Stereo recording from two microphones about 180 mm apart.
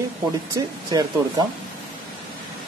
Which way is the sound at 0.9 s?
20° right (ahead or behind).